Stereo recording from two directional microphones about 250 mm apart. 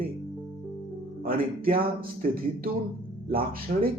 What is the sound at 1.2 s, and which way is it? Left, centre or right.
Speech, right.